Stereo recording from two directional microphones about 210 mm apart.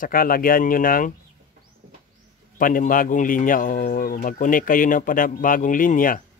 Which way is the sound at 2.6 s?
40° left (ahead or behind).